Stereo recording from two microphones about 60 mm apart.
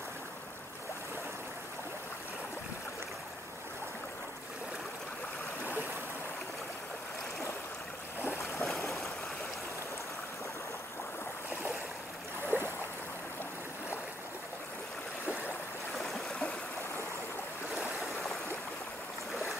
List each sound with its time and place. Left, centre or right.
8.2 s boat: left
12.4 s boat: right
16.0 s stream: centre
17.7 s stream: centre